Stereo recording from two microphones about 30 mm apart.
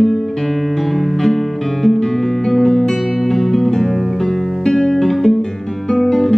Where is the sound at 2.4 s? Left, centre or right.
Centre.